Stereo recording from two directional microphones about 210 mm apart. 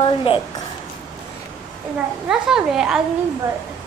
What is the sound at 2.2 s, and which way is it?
Speech, 5° right (ahead or behind).